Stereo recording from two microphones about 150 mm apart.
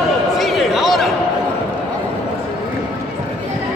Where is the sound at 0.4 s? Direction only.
Centre (ahead or behind).